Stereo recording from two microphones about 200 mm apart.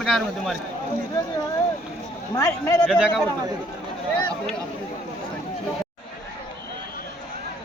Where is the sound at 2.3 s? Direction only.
15° left (ahead or behind).